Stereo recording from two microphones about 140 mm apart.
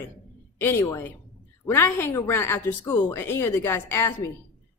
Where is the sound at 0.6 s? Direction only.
15° left (ahead or behind).